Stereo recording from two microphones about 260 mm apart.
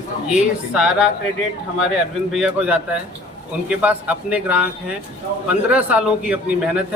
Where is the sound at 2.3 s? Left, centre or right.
Centre.